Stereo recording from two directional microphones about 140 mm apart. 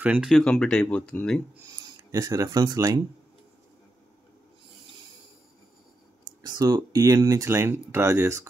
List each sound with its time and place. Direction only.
0.0 s speech: 10° right (ahead or behind)
0.4 s speech: 5° left (ahead or behind)
1.7 s speech: 25° right (ahead or behind)
6.4 s speech: 30° right (ahead or behind)